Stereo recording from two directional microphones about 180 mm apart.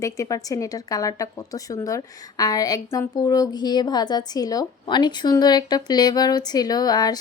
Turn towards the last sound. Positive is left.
turn(degrees=20)  # may be behind; listen again after turning